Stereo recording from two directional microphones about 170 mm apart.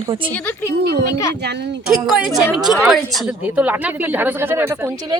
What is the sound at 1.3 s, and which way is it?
Speech, 80° right.